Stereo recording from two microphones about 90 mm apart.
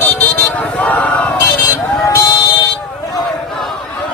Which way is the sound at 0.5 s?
15° left (ahead or behind).